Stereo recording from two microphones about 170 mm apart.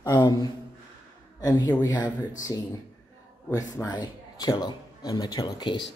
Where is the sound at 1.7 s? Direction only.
20° left (ahead or behind).